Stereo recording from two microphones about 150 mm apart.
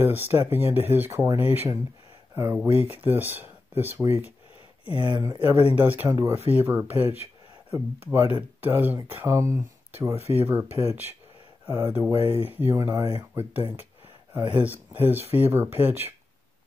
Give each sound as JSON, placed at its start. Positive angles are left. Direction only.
{"t": 0.0, "sound": "speech", "side_deg": -15}
{"t": 5.0, "sound": "speech", "side_deg": -25}
{"t": 5.8, "sound": "speech", "side_deg": -10}